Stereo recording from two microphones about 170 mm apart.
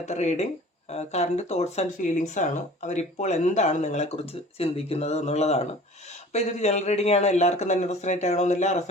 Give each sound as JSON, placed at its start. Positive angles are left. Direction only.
{"t": 0.0, "sound": "speech", "side_deg": 40}